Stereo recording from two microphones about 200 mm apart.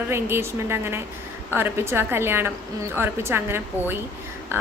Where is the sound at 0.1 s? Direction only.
10° right (ahead or behind).